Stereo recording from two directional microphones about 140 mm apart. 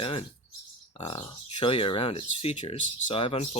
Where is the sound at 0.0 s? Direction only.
45° left (ahead or behind).